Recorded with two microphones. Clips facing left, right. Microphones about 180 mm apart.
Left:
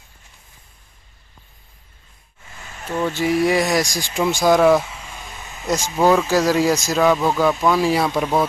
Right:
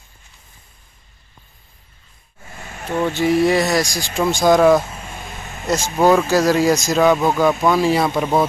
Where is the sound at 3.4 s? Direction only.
15° left (ahead or behind).